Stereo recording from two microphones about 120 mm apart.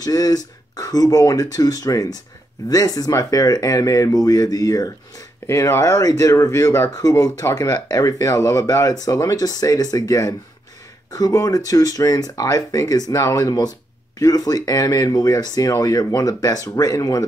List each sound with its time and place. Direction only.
0.0 s speech: 30° left (ahead or behind)